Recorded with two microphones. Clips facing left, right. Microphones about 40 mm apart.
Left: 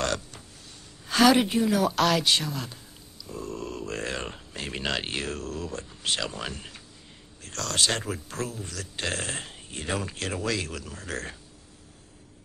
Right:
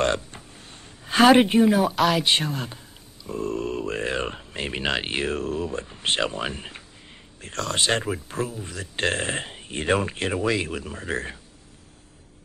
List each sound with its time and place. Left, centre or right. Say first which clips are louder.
0.0 s a sound: right 6 dB; right
2.0 s speech: right 2 dB; centre
2.2 s speech: right 3 dB; right
8.9 s speech: right 7 dB; right